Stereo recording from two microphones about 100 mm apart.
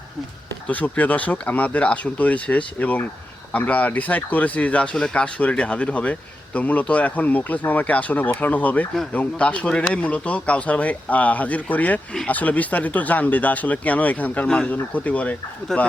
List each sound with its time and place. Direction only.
0.7 s speech: 15° left (ahead or behind)